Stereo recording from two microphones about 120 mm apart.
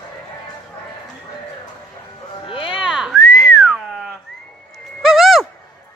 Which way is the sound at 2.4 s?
45° left (ahead or behind).